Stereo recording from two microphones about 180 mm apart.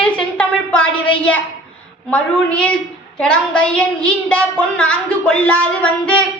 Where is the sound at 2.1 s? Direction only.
5° left (ahead or behind).